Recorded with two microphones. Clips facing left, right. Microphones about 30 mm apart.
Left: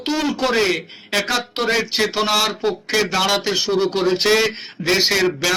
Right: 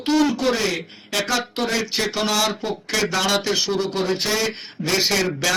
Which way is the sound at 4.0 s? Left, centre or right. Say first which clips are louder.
Left 5 dB; left.